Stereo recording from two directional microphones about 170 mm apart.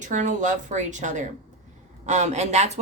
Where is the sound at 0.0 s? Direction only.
45° right (ahead or behind).